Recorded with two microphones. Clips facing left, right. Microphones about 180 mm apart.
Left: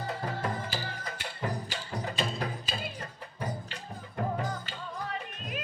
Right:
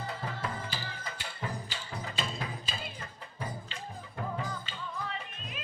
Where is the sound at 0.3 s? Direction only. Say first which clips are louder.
Left 4 dB; 45° left (ahead or behind).